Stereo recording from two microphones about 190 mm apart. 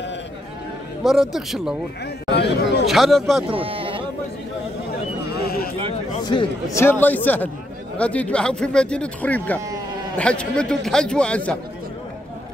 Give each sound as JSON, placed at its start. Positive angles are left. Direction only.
{"t": 1.0, "sound": "speech", "side_deg": 0}
{"t": 2.2, "sound": "speech", "side_deg": 60}
{"t": 2.9, "sound": "speech", "side_deg": 0}
{"t": 3.5, "sound": "speech", "side_deg": -30}
{"t": 5.3, "sound": "a sound", "side_deg": 55}
{"t": 6.2, "sound": "speech", "side_deg": 20}
{"t": 6.8, "sound": "speech", "side_deg": 10}